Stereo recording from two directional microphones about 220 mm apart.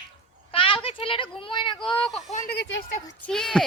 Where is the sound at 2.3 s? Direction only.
40° left (ahead or behind).